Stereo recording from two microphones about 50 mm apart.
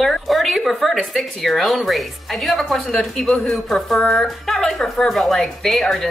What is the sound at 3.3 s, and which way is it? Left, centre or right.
A woman's voice, centre.